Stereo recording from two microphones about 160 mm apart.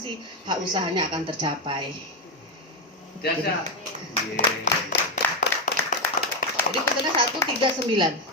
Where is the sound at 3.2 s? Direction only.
90° left.